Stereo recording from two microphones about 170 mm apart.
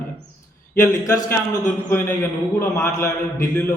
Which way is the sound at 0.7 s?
15° left (ahead or behind).